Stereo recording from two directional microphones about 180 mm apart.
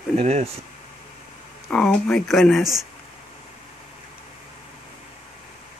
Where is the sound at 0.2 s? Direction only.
35° right (ahead or behind).